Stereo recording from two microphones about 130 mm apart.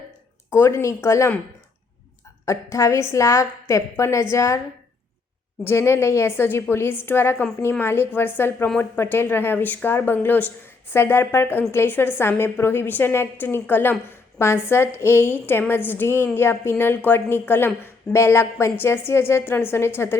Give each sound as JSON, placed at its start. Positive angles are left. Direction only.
{"t": 0.5, "sound": "a woman's voice", "side_deg": 20}
{"t": 2.4, "sound": "a woman's voice", "side_deg": 25}
{"t": 5.6, "sound": "a woman's voice", "side_deg": 20}